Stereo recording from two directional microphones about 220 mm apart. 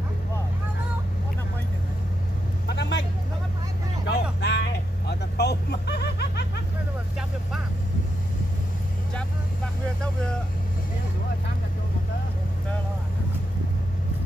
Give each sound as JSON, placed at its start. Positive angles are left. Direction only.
{"t": 2.7, "sound": "vehicle", "side_deg": 50}
{"t": 4.1, "sound": "vehicle", "side_deg": 50}